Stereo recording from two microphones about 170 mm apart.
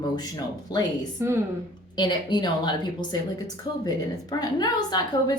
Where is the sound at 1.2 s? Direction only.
15° right (ahead or behind).